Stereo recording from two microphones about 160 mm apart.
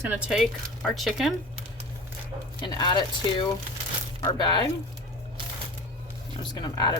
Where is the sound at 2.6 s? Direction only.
25° left (ahead or behind).